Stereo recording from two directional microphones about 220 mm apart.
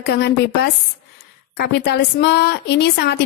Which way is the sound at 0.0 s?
50° left (ahead or behind).